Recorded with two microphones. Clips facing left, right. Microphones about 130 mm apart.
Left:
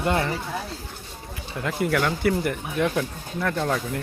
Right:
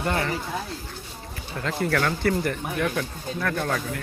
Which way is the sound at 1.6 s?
15° left (ahead or behind).